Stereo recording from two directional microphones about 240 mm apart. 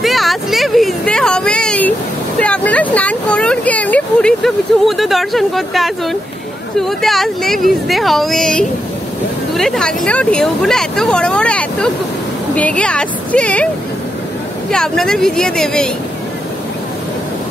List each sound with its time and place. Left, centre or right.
0.0 s a sound: centre
6.8 s speech: centre
14.7 s speech: centre